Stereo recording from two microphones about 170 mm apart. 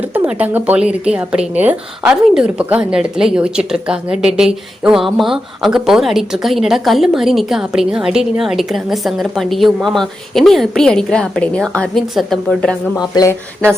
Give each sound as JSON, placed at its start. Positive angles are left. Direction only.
{"t": 0.0, "sound": "speech", "side_deg": -10}
{"t": 13.0, "sound": "speech", "side_deg": 20}